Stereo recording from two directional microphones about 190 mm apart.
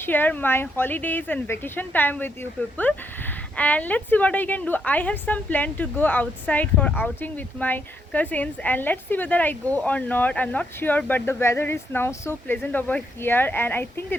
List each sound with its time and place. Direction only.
0.0 s a woman's voice: 10° left (ahead or behind)